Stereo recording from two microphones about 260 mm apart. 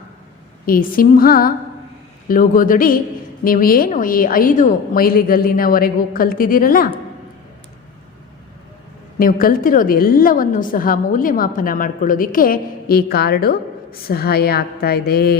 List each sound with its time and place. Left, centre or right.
0.6 s a woman's voice: left
9.1 s a woman's voice: left